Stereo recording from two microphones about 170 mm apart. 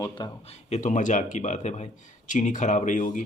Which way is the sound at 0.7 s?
50° left (ahead or behind).